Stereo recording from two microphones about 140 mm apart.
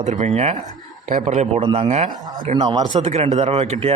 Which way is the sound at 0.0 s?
55° right (ahead or behind).